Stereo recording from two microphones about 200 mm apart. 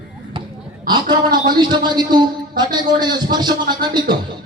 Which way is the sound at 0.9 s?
20° right (ahead or behind).